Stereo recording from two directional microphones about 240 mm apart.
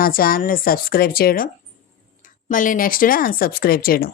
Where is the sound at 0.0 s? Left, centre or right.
Left.